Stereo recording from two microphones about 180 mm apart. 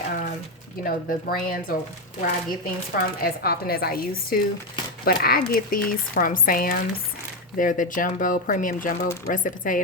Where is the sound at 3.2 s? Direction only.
55° left (ahead or behind).